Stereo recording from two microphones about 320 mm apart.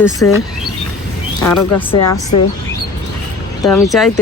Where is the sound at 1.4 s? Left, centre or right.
Centre.